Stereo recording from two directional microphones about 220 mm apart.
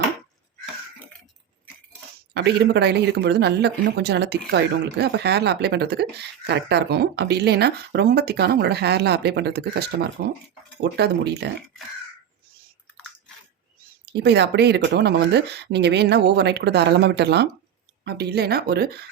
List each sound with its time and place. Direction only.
2.3 s speech: 50° right (ahead or behind)
14.0 s speech: 50° right (ahead or behind)